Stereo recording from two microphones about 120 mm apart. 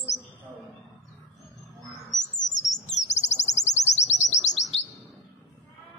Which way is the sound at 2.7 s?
80° left.